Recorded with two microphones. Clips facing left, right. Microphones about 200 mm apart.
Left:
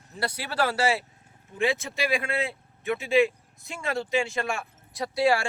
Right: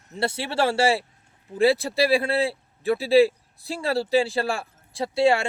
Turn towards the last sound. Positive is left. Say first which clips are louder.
# right 3 dB
turn(degrees=-25)  # may be behind; listen again after turning